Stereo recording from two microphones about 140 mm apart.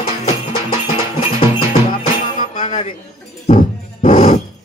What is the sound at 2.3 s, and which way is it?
Music, 55° left (ahead or behind).